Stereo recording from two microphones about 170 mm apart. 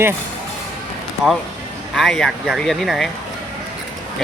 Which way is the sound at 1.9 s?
Centre (ahead or behind).